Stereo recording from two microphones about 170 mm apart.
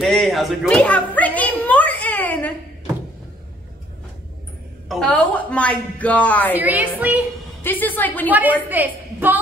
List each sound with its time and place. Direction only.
0.0 s a man's voice: centre (ahead or behind)
0.7 s a sound: 10° left (ahead or behind)
4.8 s a man's voice: 5° left (ahead or behind)
6.5 s a woman's voice: 10° right (ahead or behind)
7.6 s a man's voice: 10° left (ahead or behind)
8.3 s a woman's voice: 10° right (ahead or behind)